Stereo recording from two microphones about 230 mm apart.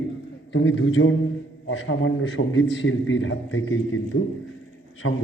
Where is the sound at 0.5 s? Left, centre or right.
Left.